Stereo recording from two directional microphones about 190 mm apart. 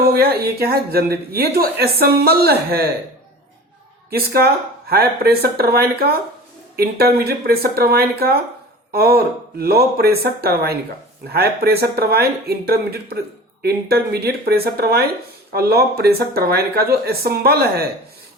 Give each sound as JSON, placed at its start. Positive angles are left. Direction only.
{"t": 0.0, "sound": "speech", "side_deg": -55}
{"t": 4.1, "sound": "speech", "side_deg": -55}